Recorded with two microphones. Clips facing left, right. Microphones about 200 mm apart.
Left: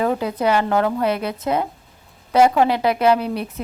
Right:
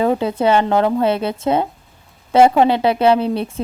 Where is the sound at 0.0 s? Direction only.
30° right (ahead or behind).